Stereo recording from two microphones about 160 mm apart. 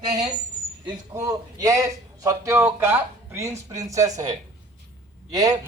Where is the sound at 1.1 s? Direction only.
20° right (ahead or behind).